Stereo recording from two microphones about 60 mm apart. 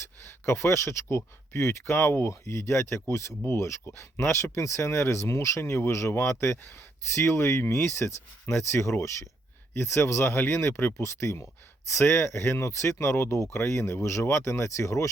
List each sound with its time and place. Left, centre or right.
0.3 s speech: left
5.5 s speech: left